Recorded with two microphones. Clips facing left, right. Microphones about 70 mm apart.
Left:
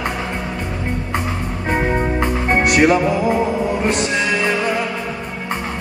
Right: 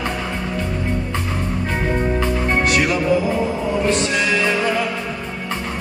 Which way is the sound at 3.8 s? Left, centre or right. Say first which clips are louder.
Even; left.